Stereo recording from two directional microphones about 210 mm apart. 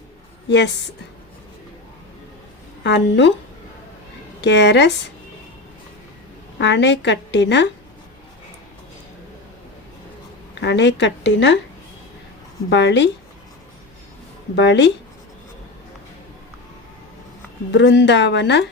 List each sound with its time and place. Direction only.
2.8 s a woman's voice: 60° left (ahead or behind)
4.4 s a woman's voice: 55° left (ahead or behind)
6.6 s a woman's voice: 55° left (ahead or behind)
10.5 s a woman's voice: 55° left (ahead or behind)
12.7 s a woman's voice: 55° left (ahead or behind)
14.5 s a woman's voice: 55° left (ahead or behind)
17.7 s a woman's voice: 55° left (ahead or behind)